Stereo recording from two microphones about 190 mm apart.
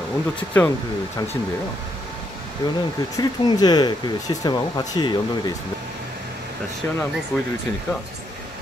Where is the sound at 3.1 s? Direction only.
20° left (ahead or behind).